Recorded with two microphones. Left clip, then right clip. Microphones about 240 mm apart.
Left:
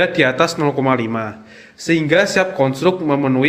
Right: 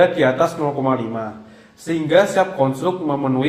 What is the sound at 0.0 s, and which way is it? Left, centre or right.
Speech, left.